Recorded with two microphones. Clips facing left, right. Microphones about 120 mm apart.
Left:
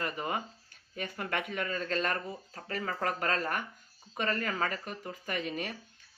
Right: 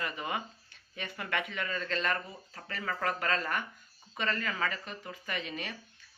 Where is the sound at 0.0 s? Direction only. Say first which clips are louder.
Left 2 dB; 40° left (ahead or behind).